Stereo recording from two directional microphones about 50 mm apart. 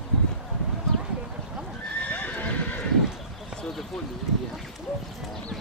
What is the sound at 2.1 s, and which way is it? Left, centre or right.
Horse, left.